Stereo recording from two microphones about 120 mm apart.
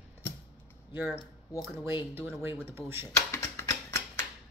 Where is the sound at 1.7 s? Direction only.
20° right (ahead or behind).